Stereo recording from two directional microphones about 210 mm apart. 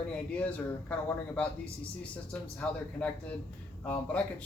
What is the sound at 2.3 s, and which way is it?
Speech, 5° left (ahead or behind).